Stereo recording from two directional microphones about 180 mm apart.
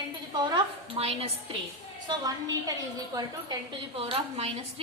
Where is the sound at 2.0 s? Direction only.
20° right (ahead or behind).